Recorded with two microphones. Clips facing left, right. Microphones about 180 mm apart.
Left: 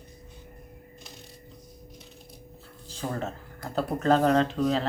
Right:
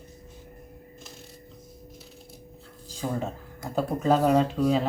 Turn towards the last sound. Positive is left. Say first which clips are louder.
# right 2 dB
turn(degrees=-10)  # may be behind; listen again after turning